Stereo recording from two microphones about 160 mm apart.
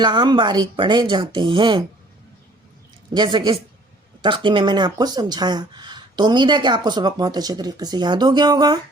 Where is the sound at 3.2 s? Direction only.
30° right (ahead or behind).